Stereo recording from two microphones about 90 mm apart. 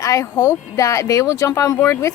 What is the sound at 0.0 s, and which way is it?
Speech, 35° left (ahead or behind).